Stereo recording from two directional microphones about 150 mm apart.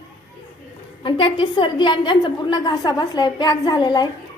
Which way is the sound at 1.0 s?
35° left (ahead or behind).